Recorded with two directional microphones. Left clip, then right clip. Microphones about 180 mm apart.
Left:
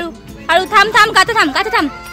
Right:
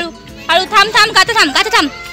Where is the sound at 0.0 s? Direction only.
15° left (ahead or behind).